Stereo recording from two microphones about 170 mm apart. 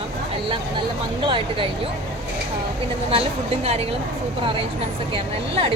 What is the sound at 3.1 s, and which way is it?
Speech, 35° right (ahead or behind).